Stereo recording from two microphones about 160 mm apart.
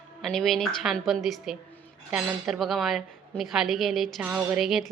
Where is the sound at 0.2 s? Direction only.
Centre (ahead or behind).